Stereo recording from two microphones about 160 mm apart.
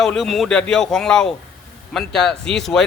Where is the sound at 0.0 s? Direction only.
Centre (ahead or behind).